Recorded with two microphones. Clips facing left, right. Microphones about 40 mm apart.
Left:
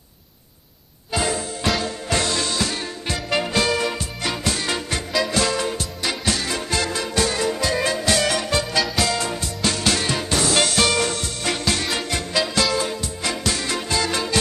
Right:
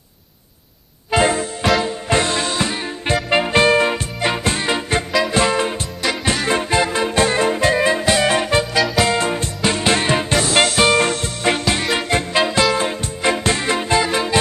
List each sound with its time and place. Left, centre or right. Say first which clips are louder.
1.1 s music: right 7 dB; right
8.7 s music: right 5 dB; centre
9.0 s music: right 5 dB; right
11.8 s music: right 5 dB; right
12.1 s music: right 6 dB; right